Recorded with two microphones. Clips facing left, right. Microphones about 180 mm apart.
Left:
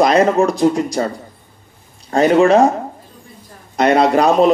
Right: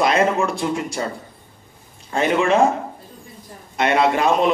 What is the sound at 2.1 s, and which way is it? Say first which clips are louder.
Speech: left 7 dB; 40° left (ahead or behind).